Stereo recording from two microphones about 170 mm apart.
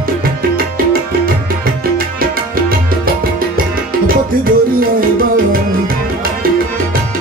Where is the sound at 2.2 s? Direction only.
60° right (ahead or behind).